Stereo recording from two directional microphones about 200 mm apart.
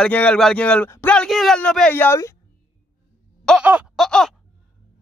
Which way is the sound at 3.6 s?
5° right (ahead or behind).